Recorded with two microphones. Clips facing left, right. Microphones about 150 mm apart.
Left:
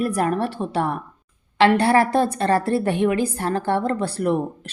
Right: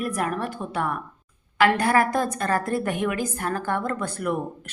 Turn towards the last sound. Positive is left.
turn(degrees=30)  # may be behind; listen again after turning